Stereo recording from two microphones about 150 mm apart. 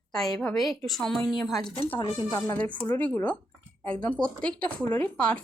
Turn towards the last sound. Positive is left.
turn(degrees=10)  # may be behind; listen again after turning